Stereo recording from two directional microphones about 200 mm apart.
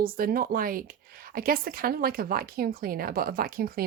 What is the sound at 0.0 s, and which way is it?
Speech, 45° right (ahead or behind).